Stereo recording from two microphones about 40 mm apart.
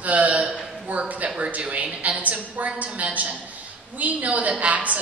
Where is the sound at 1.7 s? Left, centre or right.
Right.